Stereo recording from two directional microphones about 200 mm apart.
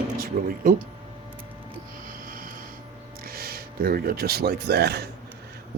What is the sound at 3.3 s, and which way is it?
Speech, 50° right (ahead or behind).